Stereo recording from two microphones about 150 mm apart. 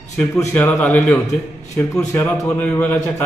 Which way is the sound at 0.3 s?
10° left (ahead or behind).